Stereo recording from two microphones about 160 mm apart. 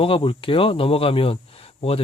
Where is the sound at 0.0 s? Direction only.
30° left (ahead or behind).